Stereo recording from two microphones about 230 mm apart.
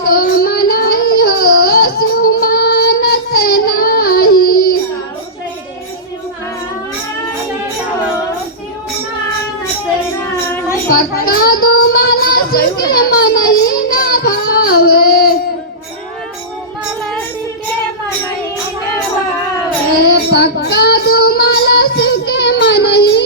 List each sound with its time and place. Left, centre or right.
0.0 s child singing: left
10.8 s child singing: left
12.9 s a sound: left
13.9 s child singing: left
20.0 s child singing: left